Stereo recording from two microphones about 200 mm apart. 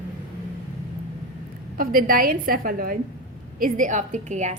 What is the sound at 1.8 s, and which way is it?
A woman's voice, 45° right (ahead or behind).